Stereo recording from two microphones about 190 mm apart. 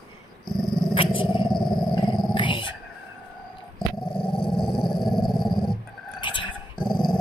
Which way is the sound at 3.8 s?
5° left (ahead or behind).